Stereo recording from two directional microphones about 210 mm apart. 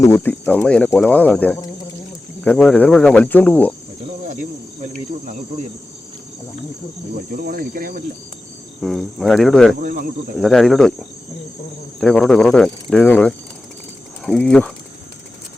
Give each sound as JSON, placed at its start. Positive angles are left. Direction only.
{"t": 0.0, "sound": "speech", "side_deg": 10}
{"t": 4.8, "sound": "cricket", "side_deg": -35}
{"t": 7.4, "sound": "speech", "side_deg": -45}
{"t": 8.8, "sound": "speech", "side_deg": 0}
{"t": 9.8, "sound": "speech", "side_deg": -40}
{"t": 10.3, "sound": "speech", "side_deg": 0}
{"t": 11.9, "sound": "speech", "side_deg": 5}